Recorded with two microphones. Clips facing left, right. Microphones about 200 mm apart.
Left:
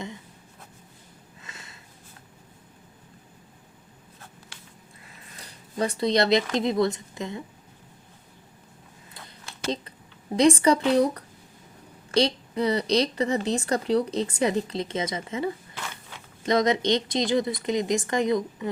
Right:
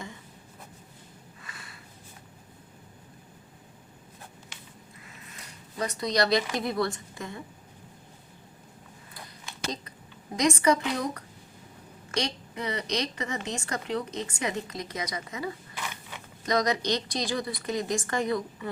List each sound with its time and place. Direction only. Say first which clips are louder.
1.4 s sniff: left 2 dB; 25° left (ahead or behind)
5.4 s speech: left 5 dB; 30° left (ahead or behind)
10.3 s a woman's voice: left 5 dB; 30° left (ahead or behind)